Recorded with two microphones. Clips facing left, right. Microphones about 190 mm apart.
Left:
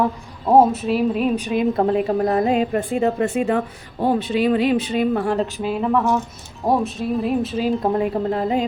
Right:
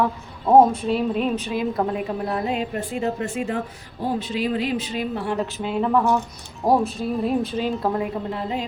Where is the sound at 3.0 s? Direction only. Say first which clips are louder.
Left 5 dB; 75° left (ahead or behind); by 5.3 s 55° left (ahead or behind).